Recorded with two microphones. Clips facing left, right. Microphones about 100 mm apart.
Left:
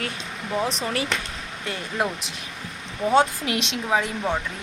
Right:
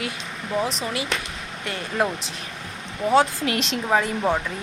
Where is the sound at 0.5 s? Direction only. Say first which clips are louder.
Right 1 dB; centre (ahead or behind).